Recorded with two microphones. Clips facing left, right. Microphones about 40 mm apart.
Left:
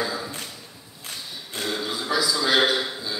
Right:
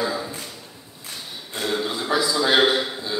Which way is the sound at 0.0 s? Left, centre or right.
Centre.